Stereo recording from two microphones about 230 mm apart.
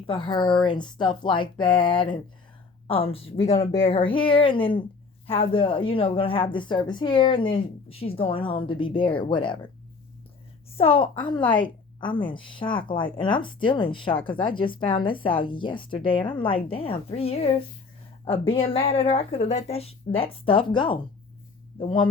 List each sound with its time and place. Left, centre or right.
0.1 s a woman's voice: left
10.8 s a woman's voice: left